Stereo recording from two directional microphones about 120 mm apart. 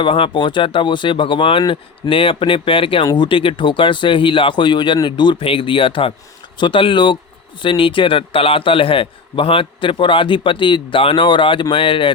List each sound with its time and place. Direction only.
0.0 s a man's voice: 45° left (ahead or behind)